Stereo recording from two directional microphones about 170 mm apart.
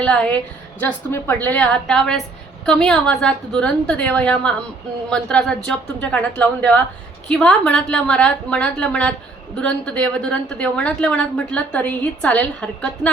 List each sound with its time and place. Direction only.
0.0 s a woman's voice: 5° left (ahead or behind)